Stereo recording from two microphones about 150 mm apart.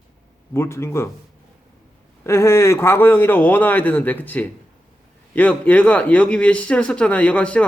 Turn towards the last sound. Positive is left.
turn(degrees=10)  # may be behind; listen again after turning